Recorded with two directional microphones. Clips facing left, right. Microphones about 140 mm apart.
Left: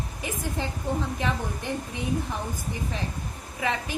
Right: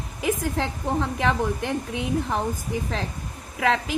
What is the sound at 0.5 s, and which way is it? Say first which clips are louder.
A woman's voice: right 4 dB; 90° right.